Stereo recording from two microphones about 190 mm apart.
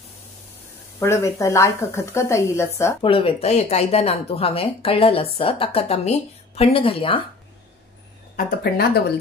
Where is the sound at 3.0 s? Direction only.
30° left (ahead or behind).